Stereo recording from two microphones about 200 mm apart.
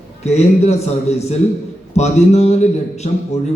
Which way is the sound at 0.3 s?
35° left (ahead or behind).